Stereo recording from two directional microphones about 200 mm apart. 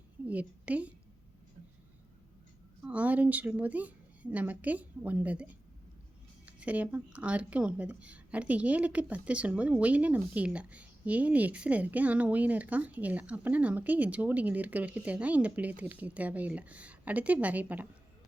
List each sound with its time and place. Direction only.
0.3 s speech: 5° right (ahead or behind)
2.8 s speech: 5° right (ahead or behind)